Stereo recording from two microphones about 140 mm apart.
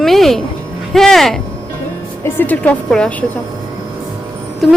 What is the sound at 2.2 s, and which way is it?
A woman's voice, 10° left (ahead or behind).